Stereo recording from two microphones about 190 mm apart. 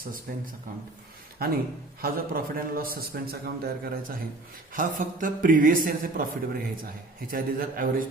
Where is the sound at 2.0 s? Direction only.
50° right (ahead or behind).